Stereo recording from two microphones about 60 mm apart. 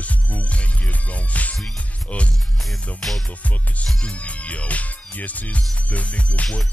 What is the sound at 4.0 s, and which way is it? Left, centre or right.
Music, left.